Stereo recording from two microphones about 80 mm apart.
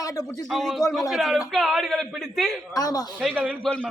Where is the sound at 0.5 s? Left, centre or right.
Centre.